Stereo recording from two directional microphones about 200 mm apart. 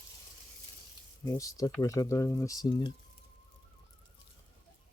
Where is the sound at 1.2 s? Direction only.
15° left (ahead or behind).